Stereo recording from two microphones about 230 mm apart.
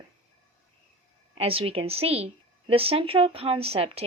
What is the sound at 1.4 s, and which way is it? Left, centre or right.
A woman's voice, right.